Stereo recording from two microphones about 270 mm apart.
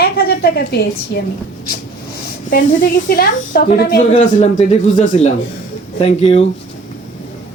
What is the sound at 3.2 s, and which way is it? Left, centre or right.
A woman's voice, left.